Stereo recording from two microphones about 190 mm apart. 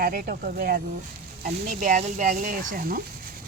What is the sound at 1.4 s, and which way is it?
A woman's voice, 40° right (ahead or behind).